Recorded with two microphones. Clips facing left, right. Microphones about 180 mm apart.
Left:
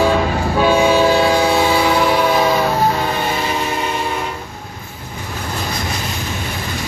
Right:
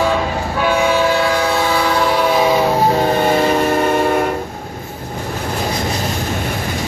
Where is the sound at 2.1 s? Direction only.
5° right (ahead or behind).